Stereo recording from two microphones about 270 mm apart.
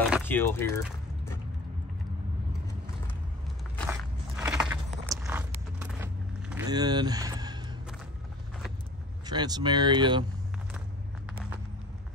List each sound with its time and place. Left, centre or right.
0.2 s speech: centre
3.9 s biting: centre
6.5 s a sound: centre
9.2 s speech: centre